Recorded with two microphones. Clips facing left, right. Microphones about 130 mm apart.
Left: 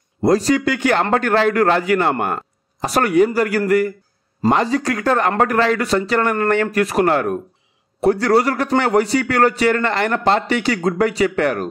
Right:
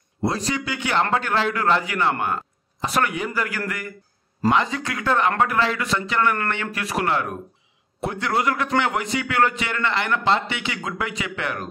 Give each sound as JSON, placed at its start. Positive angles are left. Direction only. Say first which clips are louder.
{"t": 0.2, "sound": "a man's voice", "louder": "left 9 dB", "side_deg": 45}
{"t": 2.9, "sound": "a man's voice", "louder": "left 10 dB", "side_deg": 40}